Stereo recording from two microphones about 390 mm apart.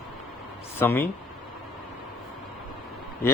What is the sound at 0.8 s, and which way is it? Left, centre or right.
Speech, centre.